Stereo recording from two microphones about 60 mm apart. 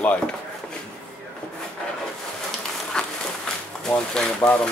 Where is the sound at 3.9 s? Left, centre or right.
Centre.